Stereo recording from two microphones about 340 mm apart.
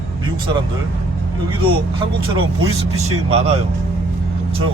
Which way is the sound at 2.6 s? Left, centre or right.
Right.